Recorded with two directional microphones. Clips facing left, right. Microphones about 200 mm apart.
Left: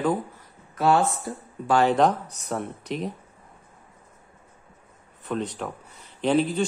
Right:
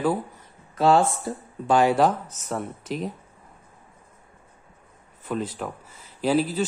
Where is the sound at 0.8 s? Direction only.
30° right (ahead or behind).